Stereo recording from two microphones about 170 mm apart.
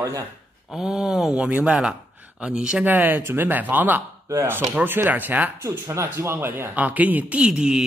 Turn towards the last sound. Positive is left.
turn(degrees=-5)  # may be behind; listen again after turning